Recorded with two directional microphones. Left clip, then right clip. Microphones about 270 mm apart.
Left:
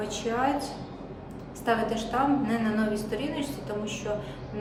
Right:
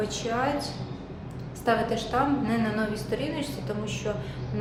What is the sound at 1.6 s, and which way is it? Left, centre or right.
Speech, centre.